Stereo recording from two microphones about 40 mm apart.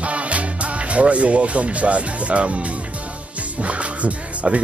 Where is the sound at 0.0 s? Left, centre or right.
Right.